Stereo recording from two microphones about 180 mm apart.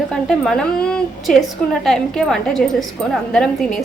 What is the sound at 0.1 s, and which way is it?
A woman's voice, 5° left (ahead or behind).